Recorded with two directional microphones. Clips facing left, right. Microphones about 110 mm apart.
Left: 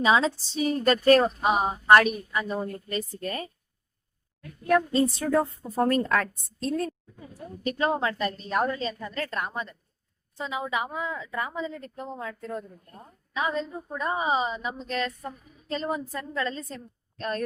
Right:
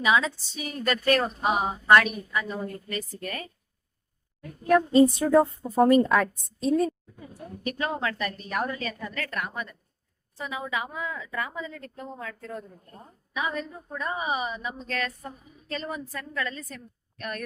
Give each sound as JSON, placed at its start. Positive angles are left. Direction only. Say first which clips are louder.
{"t": 0.0, "sound": "a woman's voice", "louder": "left 2 dB", "side_deg": 30}
{"t": 4.7, "sound": "a woman's voice", "louder": "right 4 dB", "side_deg": -15}
{"t": 7.7, "sound": "a woman's voice", "louder": "left 4 dB", "side_deg": 25}